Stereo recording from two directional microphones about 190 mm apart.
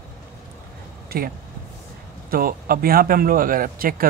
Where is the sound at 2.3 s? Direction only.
50° right (ahead or behind).